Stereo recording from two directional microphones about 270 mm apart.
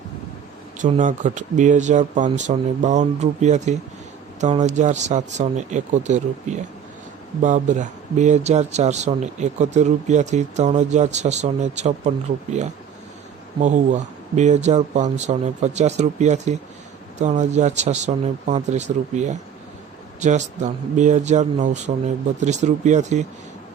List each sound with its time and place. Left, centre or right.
0.8 s speech: right